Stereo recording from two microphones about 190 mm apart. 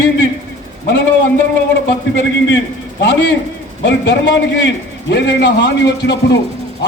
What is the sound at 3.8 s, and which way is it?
A man's voice, 65° left (ahead or behind).